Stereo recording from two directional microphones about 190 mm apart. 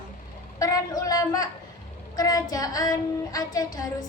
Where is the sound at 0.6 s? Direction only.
20° left (ahead or behind).